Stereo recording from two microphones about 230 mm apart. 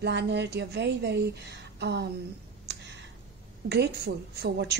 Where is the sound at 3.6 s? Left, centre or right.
Right.